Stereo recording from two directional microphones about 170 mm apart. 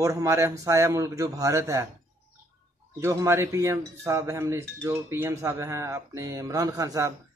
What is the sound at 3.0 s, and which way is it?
Cutlery, 15° right (ahead or behind).